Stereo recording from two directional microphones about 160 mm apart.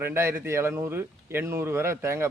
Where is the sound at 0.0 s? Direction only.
15° right (ahead or behind).